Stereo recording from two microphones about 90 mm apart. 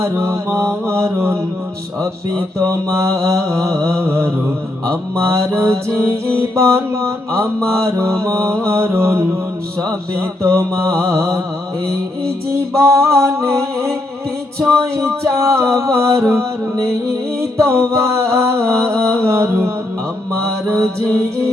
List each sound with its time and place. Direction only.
0.0 s music: 30° right (ahead or behind)
0.9 s mantra: 30° right (ahead or behind)
2.6 s music: 35° right (ahead or behind)
12.8 s music: 35° right (ahead or behind)
17.7 s music: 30° right (ahead or behind)